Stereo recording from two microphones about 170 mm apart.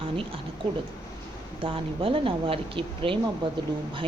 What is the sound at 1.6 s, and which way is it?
Speech, 30° right (ahead or behind).